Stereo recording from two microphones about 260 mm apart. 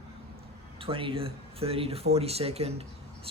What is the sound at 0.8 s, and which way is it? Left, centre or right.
Speech, centre.